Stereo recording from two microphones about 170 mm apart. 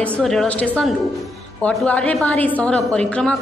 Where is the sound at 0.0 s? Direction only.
5° left (ahead or behind).